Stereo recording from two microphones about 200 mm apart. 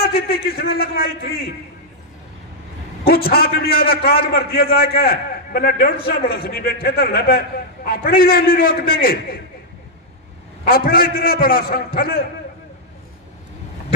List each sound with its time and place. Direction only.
0.0 s a man's voice: 50° left (ahead or behind)
3.0 s a man's voice: 50° left (ahead or behind)
10.7 s a man's voice: 45° left (ahead or behind)